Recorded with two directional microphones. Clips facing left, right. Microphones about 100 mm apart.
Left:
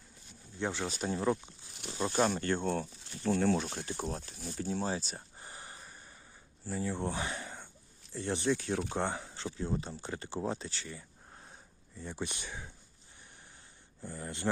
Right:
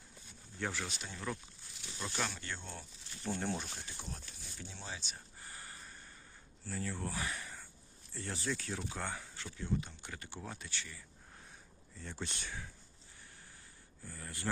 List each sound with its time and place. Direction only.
0.6 s speech: 25° left (ahead or behind)
0.9 s speech: 40° left (ahead or behind)
1.7 s wild animals: 65° left (ahead or behind)
2.0 s speech: 40° left (ahead or behind); by 2.8 s 55° left (ahead or behind)
3.2 s speech: 90° left; by 5.2 s 40° left (ahead or behind)
5.4 s a sound: 20° left (ahead or behind)
6.7 s speech: 20° left (ahead or behind)
11.9 s speech: 15° left (ahead or behind)
14.0 s speech: 25° left (ahead or behind)